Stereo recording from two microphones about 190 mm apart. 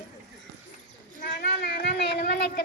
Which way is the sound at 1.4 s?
55° left (ahead or behind).